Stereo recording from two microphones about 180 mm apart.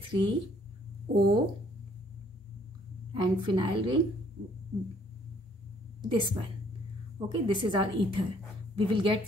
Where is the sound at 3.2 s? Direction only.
25° right (ahead or behind).